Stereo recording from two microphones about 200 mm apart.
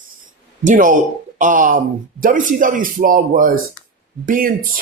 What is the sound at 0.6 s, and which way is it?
Speech, 40° right (ahead or behind).